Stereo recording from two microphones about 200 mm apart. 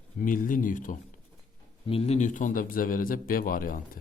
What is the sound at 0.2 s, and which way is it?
Speech, 45° left (ahead or behind).